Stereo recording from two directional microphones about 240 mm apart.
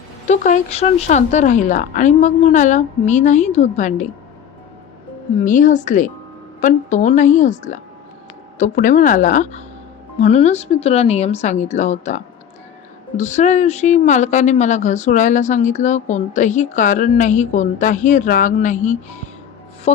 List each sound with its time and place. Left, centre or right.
0.3 s speech: left
5.5 s a woman's voice: left